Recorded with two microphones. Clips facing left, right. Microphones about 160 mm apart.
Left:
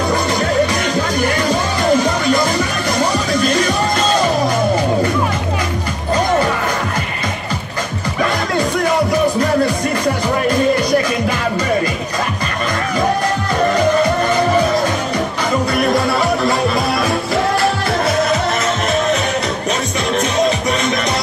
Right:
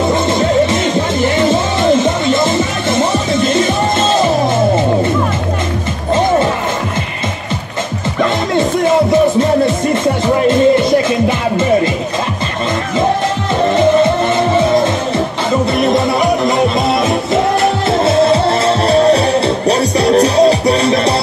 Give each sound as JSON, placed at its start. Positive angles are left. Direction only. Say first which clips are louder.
{"t": 0.1, "sound": "music", "louder": "right 4 dB", "side_deg": -25}
{"t": 8.5, "sound": "music", "louder": "right 5 dB", "side_deg": -25}
{"t": 13.7, "sound": "music", "louder": "right 6 dB", "side_deg": -25}